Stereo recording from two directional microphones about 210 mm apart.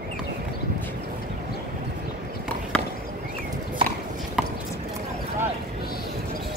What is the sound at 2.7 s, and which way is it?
Chop, 5° left (ahead or behind).